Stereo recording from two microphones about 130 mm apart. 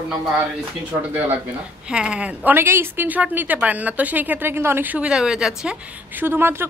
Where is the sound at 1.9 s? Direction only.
5° right (ahead or behind).